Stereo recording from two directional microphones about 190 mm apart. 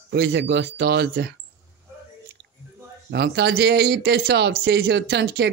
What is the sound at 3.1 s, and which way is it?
Speech, 60° right (ahead or behind).